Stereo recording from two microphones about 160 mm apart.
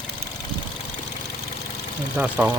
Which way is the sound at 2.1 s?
10° right (ahead or behind).